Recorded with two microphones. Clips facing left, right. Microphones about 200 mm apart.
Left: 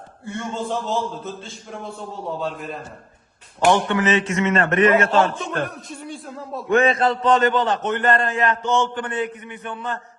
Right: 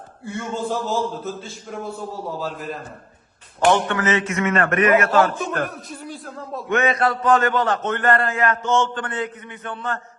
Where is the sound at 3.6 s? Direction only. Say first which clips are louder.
Left 1 dB; 15° left (ahead or behind).